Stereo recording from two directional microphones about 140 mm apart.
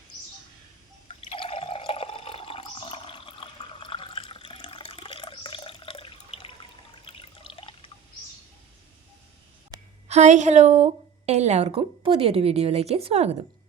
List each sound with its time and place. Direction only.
1.0 s water: 40° left (ahead or behind)
10.1 s a woman's voice: 55° right (ahead or behind)